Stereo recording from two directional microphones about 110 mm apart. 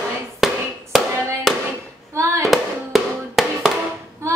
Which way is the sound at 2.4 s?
Centre (ahead or behind).